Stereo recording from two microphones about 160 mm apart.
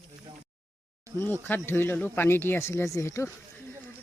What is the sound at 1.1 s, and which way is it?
Speech, 15° left (ahead or behind).